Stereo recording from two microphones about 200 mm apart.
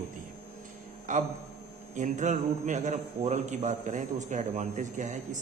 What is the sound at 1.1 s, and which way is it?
A man's voice, 40° right (ahead or behind).